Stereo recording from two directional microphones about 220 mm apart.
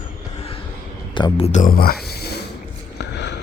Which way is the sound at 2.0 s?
45° left (ahead or behind).